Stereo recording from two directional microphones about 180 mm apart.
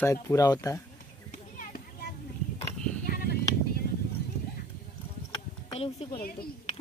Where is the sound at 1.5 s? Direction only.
55° left (ahead or behind).